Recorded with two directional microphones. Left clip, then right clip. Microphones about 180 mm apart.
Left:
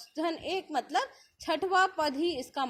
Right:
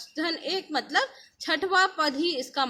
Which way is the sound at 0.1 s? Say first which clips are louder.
Right 3 dB; 15° left (ahead or behind).